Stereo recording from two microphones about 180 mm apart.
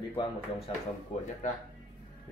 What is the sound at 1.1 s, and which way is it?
Speech, 40° left (ahead or behind).